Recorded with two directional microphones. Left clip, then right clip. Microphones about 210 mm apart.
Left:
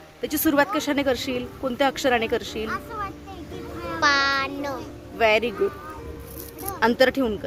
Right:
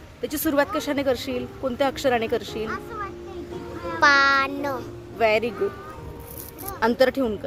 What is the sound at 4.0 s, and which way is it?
Music, 45° right (ahead or behind).